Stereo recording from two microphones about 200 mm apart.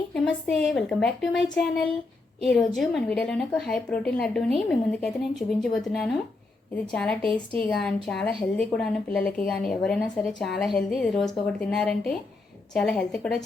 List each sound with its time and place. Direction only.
0.1 s a woman's voice: centre (ahead or behind)